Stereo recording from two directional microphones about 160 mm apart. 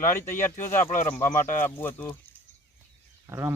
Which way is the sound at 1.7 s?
15° left (ahead or behind).